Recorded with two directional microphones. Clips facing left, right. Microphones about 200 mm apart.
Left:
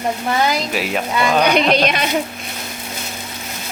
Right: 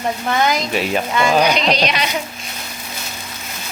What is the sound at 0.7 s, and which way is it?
Speech, centre (ahead or behind).